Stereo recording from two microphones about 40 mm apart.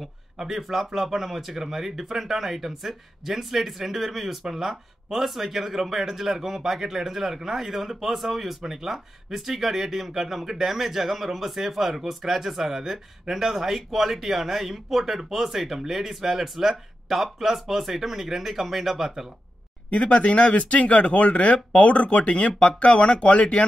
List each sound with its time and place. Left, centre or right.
0.4 s speech: centre
19.9 s speech: left